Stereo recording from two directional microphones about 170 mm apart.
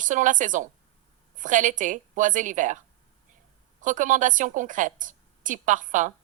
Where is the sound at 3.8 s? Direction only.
50° right (ahead or behind).